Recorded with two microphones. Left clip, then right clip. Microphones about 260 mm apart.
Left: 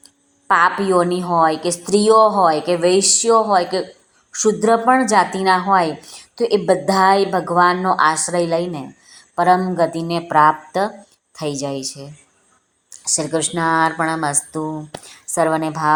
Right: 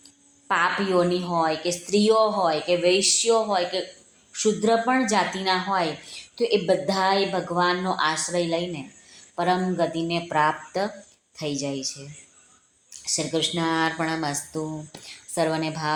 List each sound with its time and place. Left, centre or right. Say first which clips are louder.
0.4 s a woman's voice: left 8 dB; left